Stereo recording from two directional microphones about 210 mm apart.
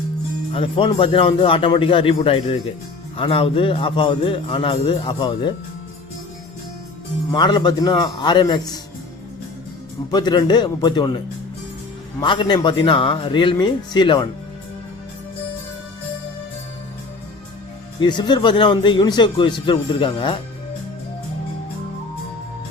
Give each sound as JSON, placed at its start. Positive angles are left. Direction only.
{"t": 0.5, "sound": "a man's voice", "side_deg": 25}
{"t": 7.3, "sound": "a man's voice", "side_deg": 20}
{"t": 10.1, "sound": "a man's voice", "side_deg": 20}
{"t": 12.2, "sound": "a man's voice", "side_deg": 25}
{"t": 18.0, "sound": "a man's voice", "side_deg": 20}